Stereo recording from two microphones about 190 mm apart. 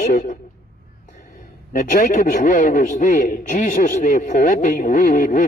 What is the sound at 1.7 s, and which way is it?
A man's voice, 45° left (ahead or behind).